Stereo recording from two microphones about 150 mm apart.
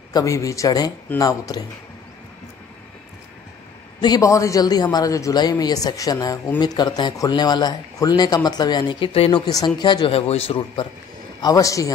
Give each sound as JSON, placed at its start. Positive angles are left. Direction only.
{"t": 0.1, "sound": "a man's voice", "side_deg": 20}
{"t": 4.0, "sound": "a man's voice", "side_deg": 25}
{"t": 11.4, "sound": "a man's voice", "side_deg": 25}